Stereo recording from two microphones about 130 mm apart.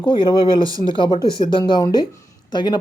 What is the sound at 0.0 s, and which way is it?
Speech, 40° left (ahead or behind).